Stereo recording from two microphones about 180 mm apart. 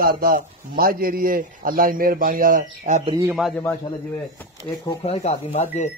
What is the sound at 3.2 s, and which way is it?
Speech, 5° right (ahead or behind).